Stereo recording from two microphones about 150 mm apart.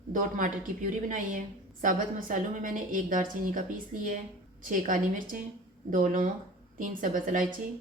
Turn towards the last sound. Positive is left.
turn(degrees=-65)  # may be behind; listen again after turning